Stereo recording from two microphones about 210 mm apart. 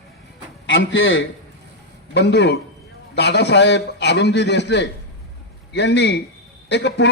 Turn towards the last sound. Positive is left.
turn(degrees=55)  # may be behind; listen again after turning